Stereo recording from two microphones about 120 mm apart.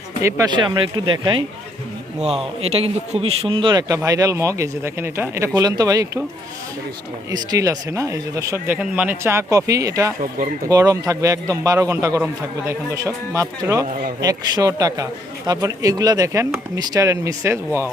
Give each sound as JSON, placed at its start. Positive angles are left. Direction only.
{"t": 0.2, "sound": "speech", "side_deg": -25}
{"t": 0.5, "sound": "speech", "side_deg": -40}
{"t": 2.6, "sound": "speech", "side_deg": -55}
{"t": 5.5, "sound": "speech", "side_deg": -35}
{"t": 7.3, "sound": "speech", "side_deg": -30}